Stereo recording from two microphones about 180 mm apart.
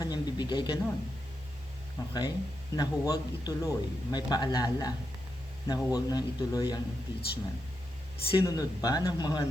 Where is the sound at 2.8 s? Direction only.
20° left (ahead or behind).